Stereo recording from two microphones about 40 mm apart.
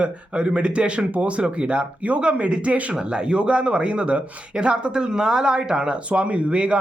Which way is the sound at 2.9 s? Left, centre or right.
Right.